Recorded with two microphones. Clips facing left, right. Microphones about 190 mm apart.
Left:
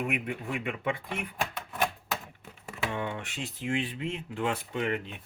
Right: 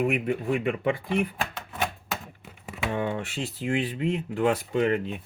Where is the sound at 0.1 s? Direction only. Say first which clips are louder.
Right 7 dB; 35° right (ahead or behind).